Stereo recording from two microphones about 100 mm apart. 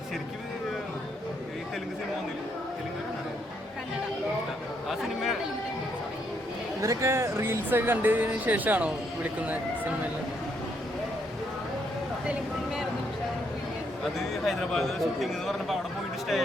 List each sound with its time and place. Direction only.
4.9 s chatter: centre (ahead or behind)
6.8 s speech: 30° right (ahead or behind); by 9.9 s 15° right (ahead or behind)
14.0 s a man's voice: centre (ahead or behind)